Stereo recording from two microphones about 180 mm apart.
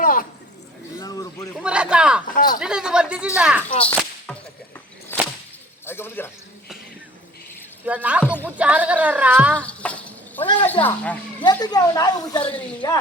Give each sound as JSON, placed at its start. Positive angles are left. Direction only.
{"t": 0.0, "sound": "a sound", "side_deg": 50}
{"t": 0.9, "sound": "a sound", "side_deg": 20}
{"t": 1.6, "sound": "speech", "side_deg": -5}
{"t": 2.3, "sound": "speech", "side_deg": 50}
{"t": 2.6, "sound": "speech", "side_deg": -5}
{"t": 3.8, "sound": "whip", "side_deg": 5}
{"t": 5.8, "sound": "a man's voice", "side_deg": 10}
{"t": 7.9, "sound": "speech", "side_deg": -10}
{"t": 9.6, "sound": "a sound", "side_deg": 5}
{"t": 10.8, "sound": "speech", "side_deg": 10}
{"t": 11.4, "sound": "speech", "side_deg": 20}